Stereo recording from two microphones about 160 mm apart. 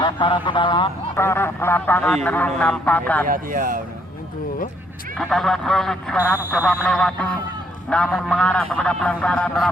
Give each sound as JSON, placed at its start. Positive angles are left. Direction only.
{"t": 0.0, "sound": "a man's voice", "side_deg": 30}
{"t": 1.1, "sound": "speech", "side_deg": 15}
{"t": 3.2, "sound": "speech", "side_deg": -60}
{"t": 5.1, "sound": "speech", "side_deg": 0}